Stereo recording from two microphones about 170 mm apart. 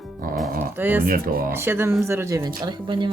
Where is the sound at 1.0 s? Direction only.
60° right (ahead or behind).